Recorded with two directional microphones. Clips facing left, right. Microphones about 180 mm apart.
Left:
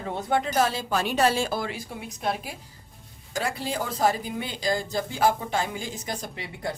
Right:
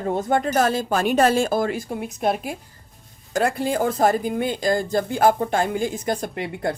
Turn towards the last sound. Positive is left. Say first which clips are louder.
# right 7 dB
turn(degrees=-55)  # may be behind; listen again after turning